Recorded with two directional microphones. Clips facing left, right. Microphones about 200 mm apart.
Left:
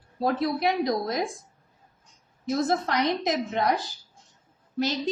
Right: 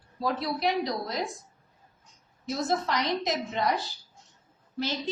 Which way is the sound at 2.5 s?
50° left (ahead or behind).